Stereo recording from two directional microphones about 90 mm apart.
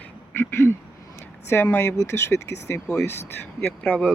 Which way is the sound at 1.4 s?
25° left (ahead or behind).